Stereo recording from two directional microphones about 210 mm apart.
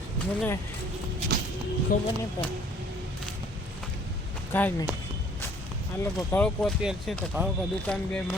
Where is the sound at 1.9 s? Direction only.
40° left (ahead or behind).